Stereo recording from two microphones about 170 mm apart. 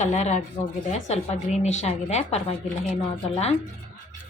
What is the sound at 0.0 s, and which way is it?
Speech, 45° left (ahead or behind).